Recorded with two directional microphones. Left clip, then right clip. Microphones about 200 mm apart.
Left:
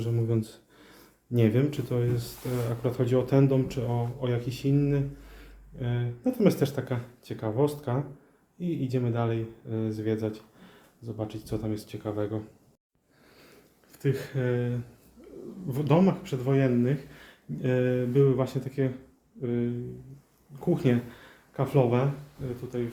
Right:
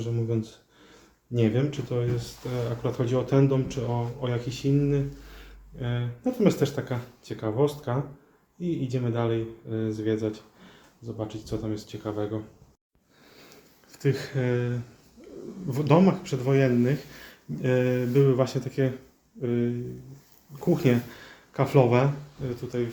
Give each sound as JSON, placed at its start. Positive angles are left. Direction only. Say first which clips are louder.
{"t": 0.0, "sound": "speech", "louder": "even", "side_deg": 25}
{"t": 2.8, "sound": "speech", "louder": "left 2 dB", "side_deg": 15}
{"t": 13.9, "sound": "speech", "louder": "right 2 dB", "side_deg": -5}